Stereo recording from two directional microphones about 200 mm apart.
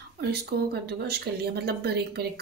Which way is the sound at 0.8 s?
55° right (ahead or behind).